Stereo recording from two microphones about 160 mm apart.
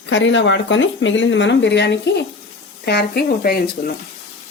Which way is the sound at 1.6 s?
90° left.